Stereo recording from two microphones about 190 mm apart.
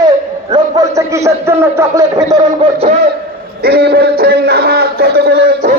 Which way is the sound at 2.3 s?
30° right (ahead or behind).